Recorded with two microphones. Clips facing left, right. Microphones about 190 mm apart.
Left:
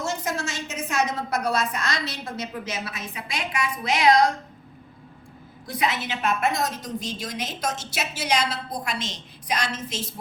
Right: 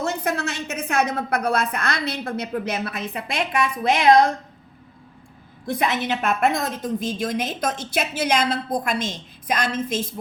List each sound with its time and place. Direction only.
0.0 s a woman's voice: 60° right (ahead or behind)
5.7 s a woman's voice: 50° right (ahead or behind)